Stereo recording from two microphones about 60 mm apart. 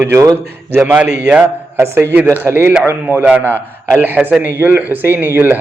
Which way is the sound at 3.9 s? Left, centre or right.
Right.